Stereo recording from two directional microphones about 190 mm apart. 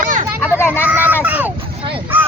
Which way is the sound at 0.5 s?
10° left (ahead or behind).